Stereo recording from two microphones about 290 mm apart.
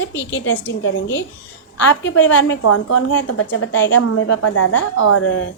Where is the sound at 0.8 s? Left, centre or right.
Left.